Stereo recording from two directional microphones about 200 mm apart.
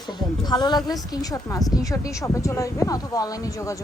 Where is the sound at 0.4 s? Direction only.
20° left (ahead or behind).